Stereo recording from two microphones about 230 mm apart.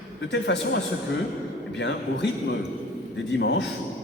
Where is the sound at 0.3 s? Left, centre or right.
Left.